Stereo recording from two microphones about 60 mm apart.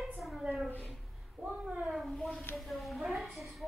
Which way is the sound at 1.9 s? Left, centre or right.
Centre.